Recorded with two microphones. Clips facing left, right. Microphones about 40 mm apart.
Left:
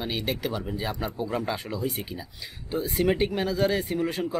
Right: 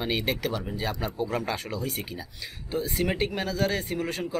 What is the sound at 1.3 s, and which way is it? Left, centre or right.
Speech, centre.